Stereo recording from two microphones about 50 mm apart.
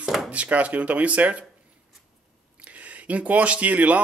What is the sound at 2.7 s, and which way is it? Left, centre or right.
Speech, right.